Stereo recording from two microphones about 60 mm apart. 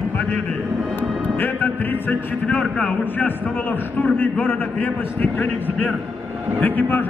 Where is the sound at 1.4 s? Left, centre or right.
Left.